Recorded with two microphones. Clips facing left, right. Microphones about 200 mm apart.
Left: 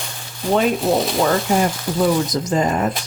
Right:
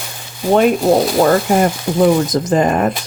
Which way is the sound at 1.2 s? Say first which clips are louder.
Right 5 dB; 55° right (ahead or behind).